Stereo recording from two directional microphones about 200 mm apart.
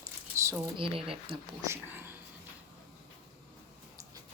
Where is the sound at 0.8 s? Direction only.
30° right (ahead or behind).